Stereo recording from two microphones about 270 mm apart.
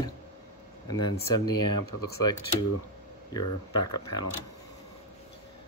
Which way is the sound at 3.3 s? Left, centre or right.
Centre.